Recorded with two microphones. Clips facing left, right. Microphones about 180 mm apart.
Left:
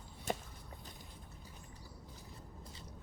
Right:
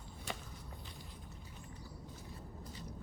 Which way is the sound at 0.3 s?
45° left (ahead or behind).